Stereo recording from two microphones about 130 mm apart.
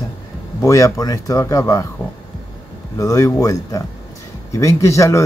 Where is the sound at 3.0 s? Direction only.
25° left (ahead or behind).